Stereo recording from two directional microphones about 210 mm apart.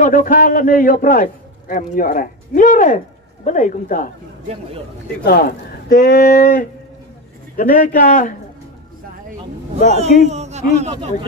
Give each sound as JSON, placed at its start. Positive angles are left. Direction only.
{"t": 0.0, "sound": "a man's voice", "side_deg": 40}
{"t": 5.2, "sound": "speech", "side_deg": 45}
{"t": 7.5, "sound": "a man's voice", "side_deg": 40}
{"t": 9.9, "sound": "a man's voice", "side_deg": -30}